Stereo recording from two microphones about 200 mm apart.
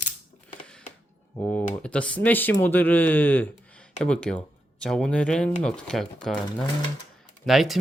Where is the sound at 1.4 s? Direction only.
15° left (ahead or behind).